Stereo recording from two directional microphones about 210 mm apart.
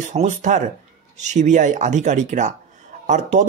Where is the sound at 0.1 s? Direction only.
35° right (ahead or behind).